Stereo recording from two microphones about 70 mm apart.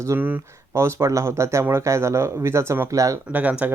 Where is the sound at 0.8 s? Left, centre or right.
Right.